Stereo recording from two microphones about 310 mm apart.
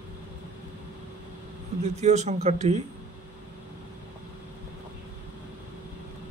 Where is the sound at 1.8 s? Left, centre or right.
Right.